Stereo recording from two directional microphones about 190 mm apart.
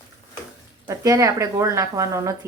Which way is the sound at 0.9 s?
15° right (ahead or behind).